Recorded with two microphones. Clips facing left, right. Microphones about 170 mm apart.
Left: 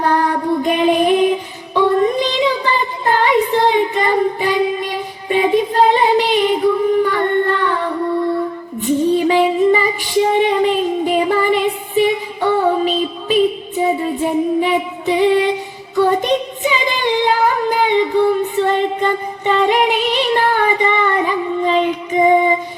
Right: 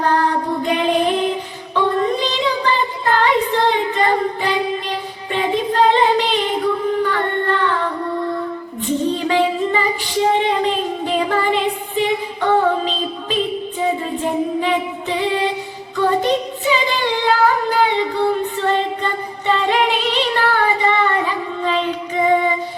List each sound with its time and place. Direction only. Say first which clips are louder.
0.0 s music: left 1 dB; 15° left (ahead or behind)
1.7 s a sound: left 4 dB; 15° left (ahead or behind)
7.0 s singing: left 4 dB; 15° left (ahead or behind)
8.9 s female singing: left 5 dB; 15° left (ahead or behind)
16.0 s singing: left 2 dB; 15° left (ahead or behind)